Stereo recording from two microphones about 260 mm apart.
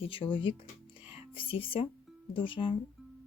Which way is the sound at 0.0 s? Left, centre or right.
Centre.